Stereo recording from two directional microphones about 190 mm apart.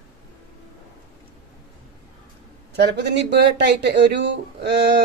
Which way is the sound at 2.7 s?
60° right (ahead or behind).